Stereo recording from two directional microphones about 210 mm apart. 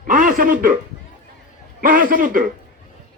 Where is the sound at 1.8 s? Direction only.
40° right (ahead or behind).